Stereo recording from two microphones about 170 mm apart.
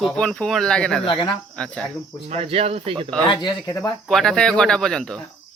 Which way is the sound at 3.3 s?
25° left (ahead or behind).